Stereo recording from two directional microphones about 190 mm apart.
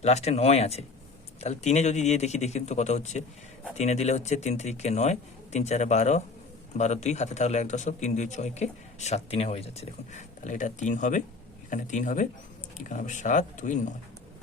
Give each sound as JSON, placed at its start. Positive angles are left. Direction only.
{"t": 0.0, "sound": "speech", "side_deg": 35}